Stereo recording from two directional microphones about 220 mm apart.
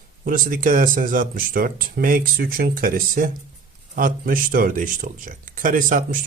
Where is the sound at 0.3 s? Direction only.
40° right (ahead or behind).